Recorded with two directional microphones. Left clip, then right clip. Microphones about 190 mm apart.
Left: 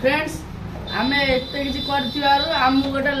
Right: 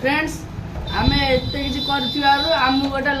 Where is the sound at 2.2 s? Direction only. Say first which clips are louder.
Right 1 dB; 20° right (ahead or behind).